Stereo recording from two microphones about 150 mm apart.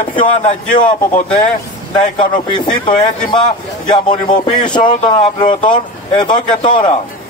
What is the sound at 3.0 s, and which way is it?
A man's voice, 35° left (ahead or behind).